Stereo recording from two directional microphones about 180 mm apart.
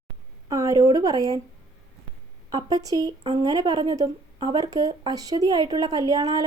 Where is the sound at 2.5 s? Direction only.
20° right (ahead or behind).